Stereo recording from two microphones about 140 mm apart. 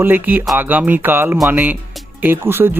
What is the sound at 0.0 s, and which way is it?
Speech, 15° right (ahead or behind).